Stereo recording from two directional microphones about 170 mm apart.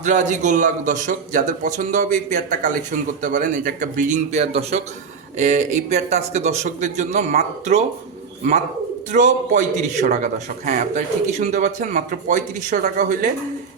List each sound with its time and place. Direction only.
0.0 s a man's voice: 45° right (ahead or behind)
9.1 s a man's voice: 50° right (ahead or behind)